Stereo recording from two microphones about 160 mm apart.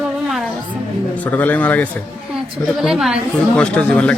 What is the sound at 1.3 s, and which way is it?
Speech, 10° left (ahead or behind).